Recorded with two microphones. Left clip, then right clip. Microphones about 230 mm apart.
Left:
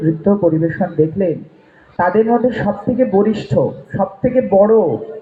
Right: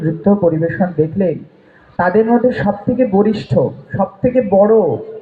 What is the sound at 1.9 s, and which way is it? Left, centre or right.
Speech, right.